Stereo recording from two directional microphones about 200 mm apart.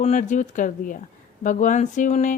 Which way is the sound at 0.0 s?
35° left (ahead or behind).